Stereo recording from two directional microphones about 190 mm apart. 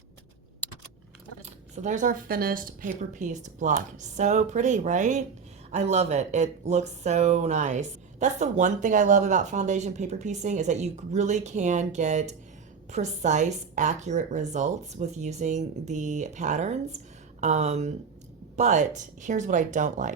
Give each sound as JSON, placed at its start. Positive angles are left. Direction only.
{"t": 1.4, "sound": "speech", "side_deg": -35}